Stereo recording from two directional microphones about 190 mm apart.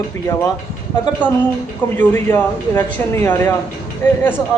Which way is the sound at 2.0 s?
10° left (ahead or behind).